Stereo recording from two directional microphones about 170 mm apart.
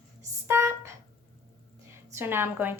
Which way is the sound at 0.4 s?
15° right (ahead or behind).